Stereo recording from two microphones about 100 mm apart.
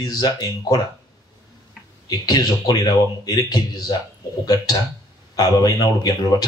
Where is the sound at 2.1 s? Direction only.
40° left (ahead or behind).